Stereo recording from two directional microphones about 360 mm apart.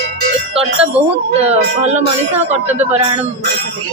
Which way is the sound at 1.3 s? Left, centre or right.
Centre.